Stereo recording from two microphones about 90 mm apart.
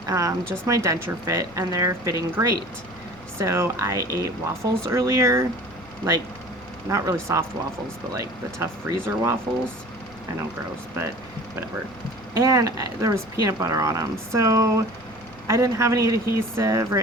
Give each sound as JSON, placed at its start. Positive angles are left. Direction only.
{"t": 0.0, "sound": "speech", "side_deg": -35}
{"t": 6.8, "sound": "speech", "side_deg": -35}
{"t": 9.0, "sound": "speech", "side_deg": -25}
{"t": 12.3, "sound": "speech", "side_deg": -40}